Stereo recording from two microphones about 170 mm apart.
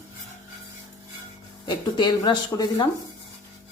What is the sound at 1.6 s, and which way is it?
Speech, 25° left (ahead or behind).